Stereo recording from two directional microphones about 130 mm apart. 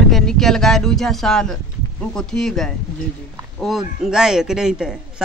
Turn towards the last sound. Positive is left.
turn(degrees=-5)  # may be behind; listen again after turning